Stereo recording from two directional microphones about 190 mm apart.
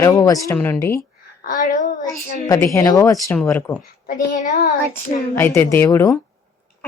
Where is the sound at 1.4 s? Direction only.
45° left (ahead or behind).